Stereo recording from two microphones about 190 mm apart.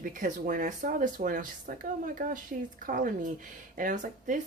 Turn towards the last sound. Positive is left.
turn(degrees=-40)  # may be behind; listen again after turning